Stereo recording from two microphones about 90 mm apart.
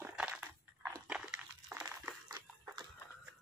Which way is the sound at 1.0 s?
15° right (ahead or behind).